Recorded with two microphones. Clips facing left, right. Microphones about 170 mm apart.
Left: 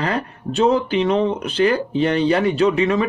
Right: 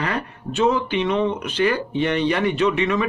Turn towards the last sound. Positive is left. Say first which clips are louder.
# left 3 dB
turn(degrees=35)  # may be behind; listen again after turning